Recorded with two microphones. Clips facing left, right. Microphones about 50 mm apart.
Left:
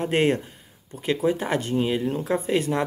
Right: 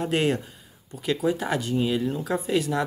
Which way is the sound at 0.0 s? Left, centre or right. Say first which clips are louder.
Left 2 dB; left.